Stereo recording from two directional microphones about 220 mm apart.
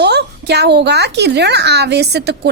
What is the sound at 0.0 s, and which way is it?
A woman's voice, 50° right (ahead or behind).